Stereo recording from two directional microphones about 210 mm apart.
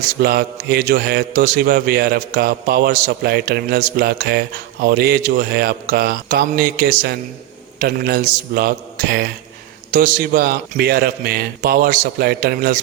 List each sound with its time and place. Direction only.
0.2 s a man's voice: 50° right (ahead or behind)